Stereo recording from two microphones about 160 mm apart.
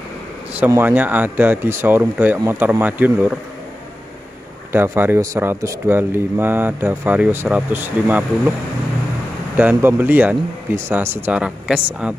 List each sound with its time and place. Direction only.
0.6 s a man's voice: 15° right (ahead or behind)
4.7 s a man's voice: 15° right (ahead or behind)
9.6 s a man's voice: 10° right (ahead or behind)